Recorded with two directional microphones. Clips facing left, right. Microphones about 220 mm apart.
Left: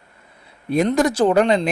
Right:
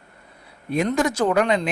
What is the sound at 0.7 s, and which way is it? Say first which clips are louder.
Speech: left 4 dB; 35° left (ahead or behind).